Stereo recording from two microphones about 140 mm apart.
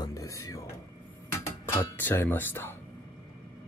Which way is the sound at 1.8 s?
15° left (ahead or behind).